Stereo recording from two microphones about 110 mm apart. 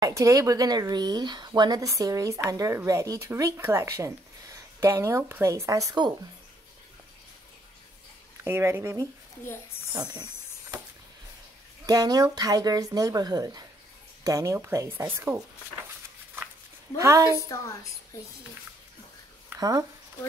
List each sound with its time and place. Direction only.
0.0 s speech: 30° right (ahead or behind)
8.5 s speech: 20° right (ahead or behind)
9.9 s a sound: 35° right (ahead or behind)
11.8 s speech: 35° right (ahead or behind)
16.9 s speech: 25° right (ahead or behind)
19.6 s speech: 30° right (ahead or behind)